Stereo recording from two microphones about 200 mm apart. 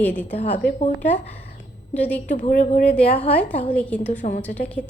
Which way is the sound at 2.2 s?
40° left (ahead or behind).